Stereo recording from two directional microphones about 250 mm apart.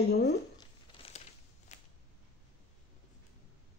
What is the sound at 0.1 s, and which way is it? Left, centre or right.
Speech, left.